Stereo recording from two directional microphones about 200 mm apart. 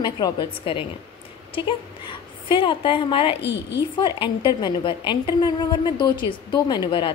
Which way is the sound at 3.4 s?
60° left (ahead or behind).